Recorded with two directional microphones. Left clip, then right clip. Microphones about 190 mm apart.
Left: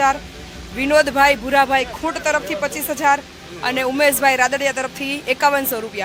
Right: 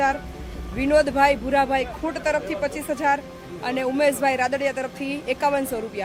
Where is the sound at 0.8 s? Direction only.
5° left (ahead or behind).